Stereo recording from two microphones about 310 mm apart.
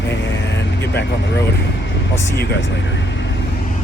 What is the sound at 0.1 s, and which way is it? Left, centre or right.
Vehicle, left.